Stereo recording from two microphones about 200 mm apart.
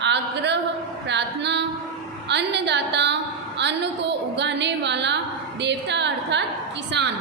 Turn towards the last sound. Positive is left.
turn(degrees=-60)  # may be behind; listen again after turning